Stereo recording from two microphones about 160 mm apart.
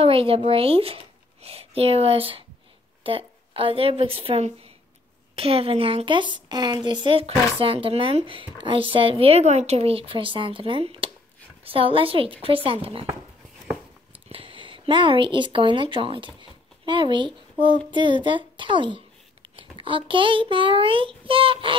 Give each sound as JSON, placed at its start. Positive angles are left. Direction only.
{"t": 0.0, "sound": "a woman's voice", "side_deg": -35}
{"t": 14.3, "sound": "a woman's voice", "side_deg": -35}